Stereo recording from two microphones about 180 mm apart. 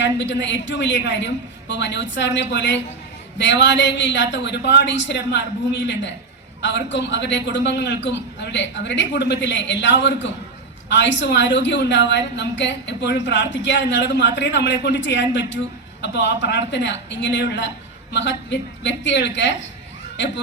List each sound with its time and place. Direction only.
0.0 s a woman's voice: 80° left